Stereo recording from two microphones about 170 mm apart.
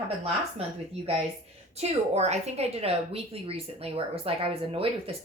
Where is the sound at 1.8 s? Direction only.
40° right (ahead or behind).